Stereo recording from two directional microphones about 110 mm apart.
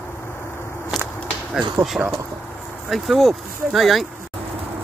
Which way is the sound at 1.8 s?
25° right (ahead or behind).